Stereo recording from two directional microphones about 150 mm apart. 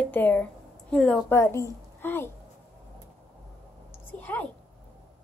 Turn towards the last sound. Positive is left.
turn(degrees=10)  # may be behind; listen again after turning